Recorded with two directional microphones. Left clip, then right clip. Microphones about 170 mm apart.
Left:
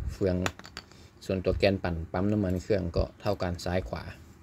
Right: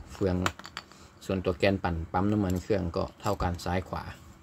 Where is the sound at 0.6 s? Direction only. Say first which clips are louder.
Right 3 dB; 15° left (ahead or behind).